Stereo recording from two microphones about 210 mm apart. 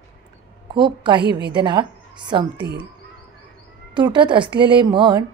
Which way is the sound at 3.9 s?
20° right (ahead or behind).